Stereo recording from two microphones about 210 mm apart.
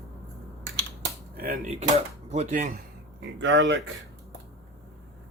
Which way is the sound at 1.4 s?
45° right (ahead or behind).